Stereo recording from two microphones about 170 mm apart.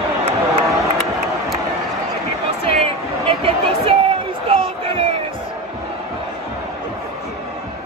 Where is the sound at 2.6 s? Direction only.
35° right (ahead or behind).